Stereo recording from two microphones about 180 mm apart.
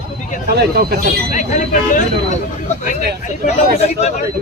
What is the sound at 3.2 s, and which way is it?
Speech, 40° left (ahead or behind).